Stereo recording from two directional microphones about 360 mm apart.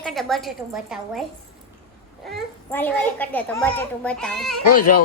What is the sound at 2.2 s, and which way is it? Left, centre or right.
Speech, centre.